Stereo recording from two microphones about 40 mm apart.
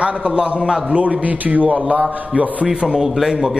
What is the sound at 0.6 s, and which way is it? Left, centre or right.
Speech, centre.